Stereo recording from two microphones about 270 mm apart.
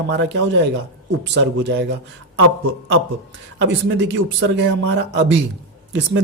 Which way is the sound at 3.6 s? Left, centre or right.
Right.